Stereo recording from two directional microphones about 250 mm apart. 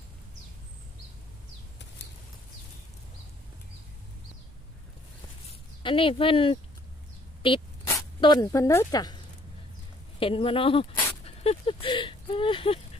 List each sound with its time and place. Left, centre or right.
5.8 s speech: left
10.1 s dog: left